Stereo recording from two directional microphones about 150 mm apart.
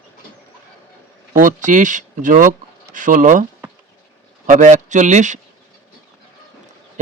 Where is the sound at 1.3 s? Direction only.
60° right (ahead or behind).